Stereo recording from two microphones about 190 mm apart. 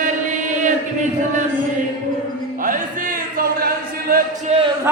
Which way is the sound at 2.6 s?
45° right (ahead or behind).